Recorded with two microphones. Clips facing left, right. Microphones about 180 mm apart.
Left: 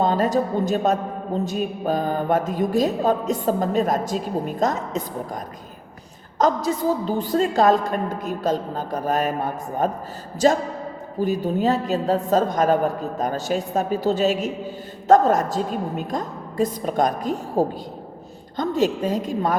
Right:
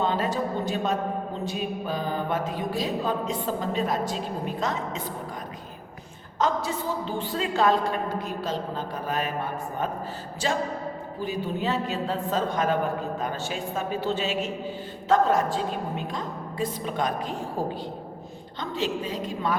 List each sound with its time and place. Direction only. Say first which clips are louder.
0.0 s music: left 6 dB; 40° left (ahead or behind)
6.4 s a woman's voice: left 6 dB; 40° left (ahead or behind)
10.4 s music: left 10 dB; 40° left (ahead or behind)
11.2 s a woman's voice: left 8 dB; 40° left (ahead or behind)
15.0 s music: left 6 dB; 45° left (ahead or behind)